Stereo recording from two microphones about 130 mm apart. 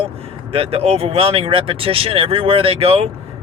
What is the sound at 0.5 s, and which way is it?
Speech, 50° right (ahead or behind).